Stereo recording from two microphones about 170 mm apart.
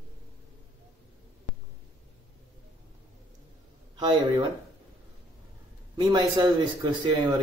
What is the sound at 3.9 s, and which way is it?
Speech, 25° right (ahead or behind).